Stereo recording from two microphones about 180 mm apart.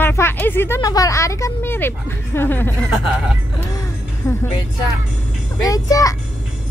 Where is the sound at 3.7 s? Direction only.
15° left (ahead or behind).